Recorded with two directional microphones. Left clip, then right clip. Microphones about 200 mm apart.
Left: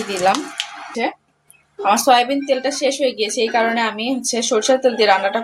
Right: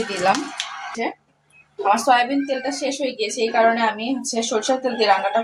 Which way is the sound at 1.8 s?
40° left (ahead or behind).